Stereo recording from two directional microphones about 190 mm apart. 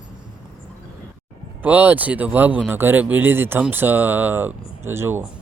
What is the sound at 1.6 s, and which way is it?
Speech, 10° right (ahead or behind).